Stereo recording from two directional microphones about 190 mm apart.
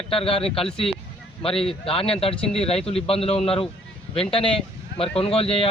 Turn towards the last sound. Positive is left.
turn(degrees=30)  # may be behind; listen again after turning